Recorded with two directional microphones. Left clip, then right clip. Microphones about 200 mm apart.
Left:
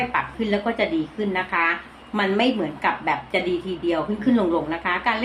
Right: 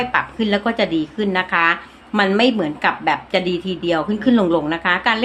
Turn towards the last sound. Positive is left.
turn(degrees=-40)  # may be behind; listen again after turning